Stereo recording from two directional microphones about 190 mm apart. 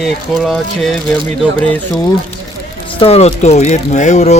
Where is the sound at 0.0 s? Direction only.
Centre (ahead or behind).